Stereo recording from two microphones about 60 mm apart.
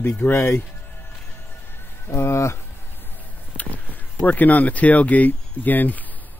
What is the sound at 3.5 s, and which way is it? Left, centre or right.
Speech, left.